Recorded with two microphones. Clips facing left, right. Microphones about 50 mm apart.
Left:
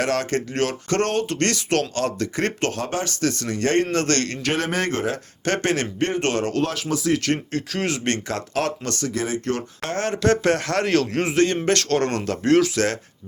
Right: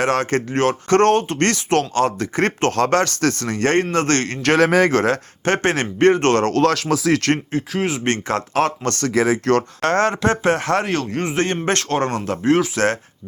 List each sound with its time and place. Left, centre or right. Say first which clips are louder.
0.0 s speech: right 4 dB; right
2.7 s speech: right 9 dB; right
4.9 s speech: right 7 dB; right
5.5 s speech: right 3 dB; right
6.1 s speech: right 8 dB; right
6.7 s speech: right 5 dB; right
7.5 s speech: right 3 dB; centre
8.0 s speech: right 4 dB; right
9.0 s speech: right 8 dB; right
10.2 s speech: right 1 dB; right
10.8 s speech: left 2 dB; centre
11.3 s speech: left 1 dB; right
12.7 s speech: right 3 dB; right